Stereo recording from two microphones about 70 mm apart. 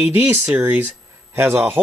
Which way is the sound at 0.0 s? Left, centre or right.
Right.